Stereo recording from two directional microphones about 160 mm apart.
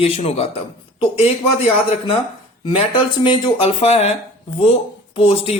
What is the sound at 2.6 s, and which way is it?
Speech, 30° left (ahead or behind).